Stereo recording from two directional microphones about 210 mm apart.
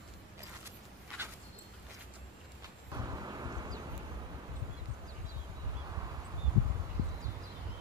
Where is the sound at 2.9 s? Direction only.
15° right (ahead or behind).